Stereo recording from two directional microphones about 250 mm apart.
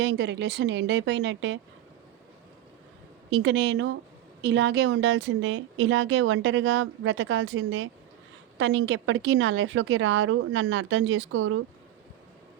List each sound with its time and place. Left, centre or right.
0.0 s a woman's voice: right
3.2 s a woman's voice: right